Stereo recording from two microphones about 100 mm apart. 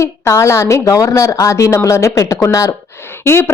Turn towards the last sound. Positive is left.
turn(degrees=25)  # may be behind; listen again after turning